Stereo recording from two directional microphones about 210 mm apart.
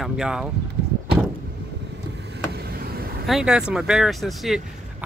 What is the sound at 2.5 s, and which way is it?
Vehicle, 45° right (ahead or behind).